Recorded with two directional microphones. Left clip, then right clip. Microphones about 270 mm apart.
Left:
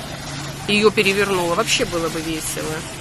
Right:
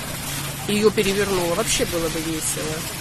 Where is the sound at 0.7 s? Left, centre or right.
Centre.